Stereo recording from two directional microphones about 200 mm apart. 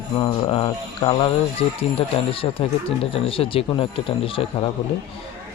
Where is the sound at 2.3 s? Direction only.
30° left (ahead or behind).